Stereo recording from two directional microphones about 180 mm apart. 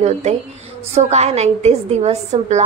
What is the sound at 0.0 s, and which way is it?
A woman's voice, 40° right (ahead or behind).